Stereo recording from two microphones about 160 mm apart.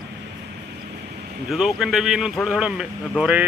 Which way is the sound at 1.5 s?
Centre (ahead or behind).